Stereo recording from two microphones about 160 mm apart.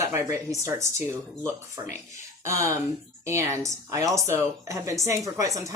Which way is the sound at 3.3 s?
15° right (ahead or behind).